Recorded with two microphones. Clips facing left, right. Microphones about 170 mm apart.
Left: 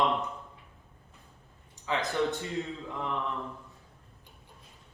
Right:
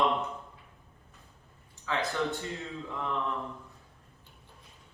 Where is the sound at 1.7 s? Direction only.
20° left (ahead or behind).